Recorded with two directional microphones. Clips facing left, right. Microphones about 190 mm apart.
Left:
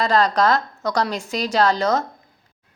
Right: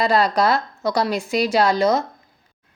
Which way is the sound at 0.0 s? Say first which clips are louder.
Even; 10° right (ahead or behind).